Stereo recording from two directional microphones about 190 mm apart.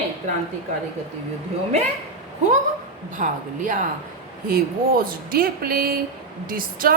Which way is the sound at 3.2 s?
40° right (ahead or behind).